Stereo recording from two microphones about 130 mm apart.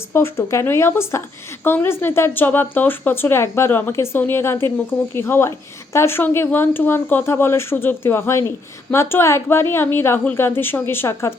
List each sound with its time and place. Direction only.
0.1 s a woman's voice: 20° left (ahead or behind)